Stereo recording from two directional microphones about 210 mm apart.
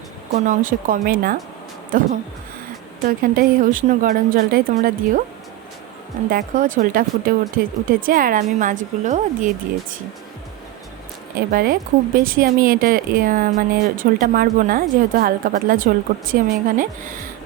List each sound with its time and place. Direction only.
0.4 s speech: 40° right (ahead or behind)
3.1 s speech: 40° right (ahead or behind)
6.2 s speech: 40° right (ahead or behind)
11.3 s speech: 40° right (ahead or behind)